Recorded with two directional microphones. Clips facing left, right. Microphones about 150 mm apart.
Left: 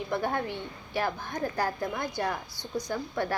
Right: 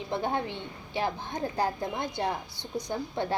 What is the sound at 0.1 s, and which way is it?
A woman's voice, 20° right (ahead or behind).